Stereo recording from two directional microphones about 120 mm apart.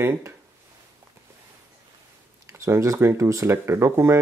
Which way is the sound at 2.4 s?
25° right (ahead or behind).